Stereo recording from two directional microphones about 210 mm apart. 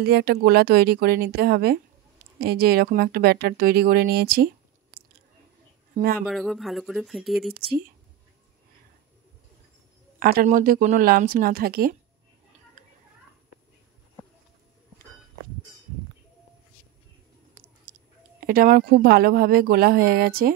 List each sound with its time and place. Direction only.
0.0 s speech: 50° right (ahead or behind)
5.9 s speech: 45° right (ahead or behind)
6.2 s speech: centre (ahead or behind)
10.1 s speech: 45° right (ahead or behind)
17.9 s a sound: 45° right (ahead or behind)
18.5 s speech: 40° right (ahead or behind)